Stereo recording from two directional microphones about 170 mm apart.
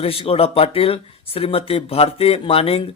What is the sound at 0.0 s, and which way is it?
Speech, 35° left (ahead or behind).